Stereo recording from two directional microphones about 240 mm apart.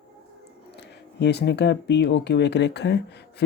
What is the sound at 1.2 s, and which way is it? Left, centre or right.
Speech, left.